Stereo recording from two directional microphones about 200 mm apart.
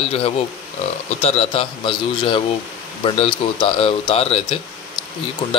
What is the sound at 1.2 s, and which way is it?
Speech, 30° left (ahead or behind).